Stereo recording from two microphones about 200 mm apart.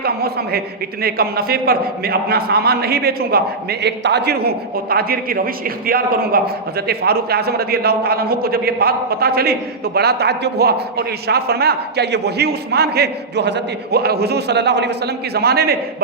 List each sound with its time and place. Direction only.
0.0 s a man's voice: 50° right (ahead or behind)